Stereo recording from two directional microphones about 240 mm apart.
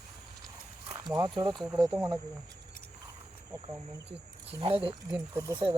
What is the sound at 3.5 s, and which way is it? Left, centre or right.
Speech, centre.